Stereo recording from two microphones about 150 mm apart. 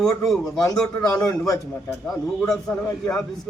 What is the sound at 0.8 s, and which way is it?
Speech, 5° left (ahead or behind).